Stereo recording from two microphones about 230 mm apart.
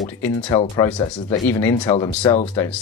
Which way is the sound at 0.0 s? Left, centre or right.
Centre.